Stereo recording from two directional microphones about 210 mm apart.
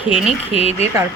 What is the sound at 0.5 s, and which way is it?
Speech, 30° left (ahead or behind).